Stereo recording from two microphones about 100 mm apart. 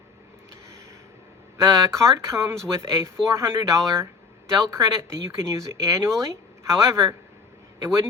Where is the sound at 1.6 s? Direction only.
35° right (ahead or behind).